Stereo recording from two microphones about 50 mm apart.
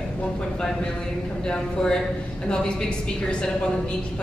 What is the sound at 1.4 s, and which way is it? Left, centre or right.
Speech, centre.